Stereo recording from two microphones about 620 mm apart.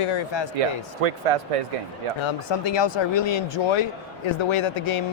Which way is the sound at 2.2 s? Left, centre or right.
Left.